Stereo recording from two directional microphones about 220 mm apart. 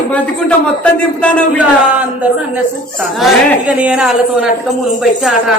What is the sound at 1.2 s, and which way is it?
Speech, 5° left (ahead or behind).